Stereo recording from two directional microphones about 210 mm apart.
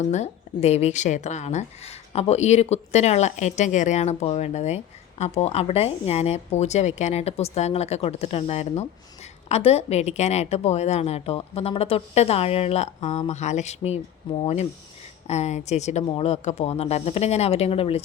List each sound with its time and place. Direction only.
0.0 s a woman's voice: 30° left (ahead or behind)